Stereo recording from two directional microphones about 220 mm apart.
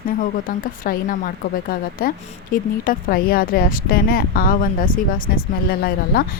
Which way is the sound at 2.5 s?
40° left (ahead or behind).